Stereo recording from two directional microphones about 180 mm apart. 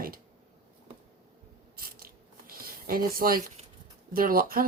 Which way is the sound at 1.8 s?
55° right (ahead or behind).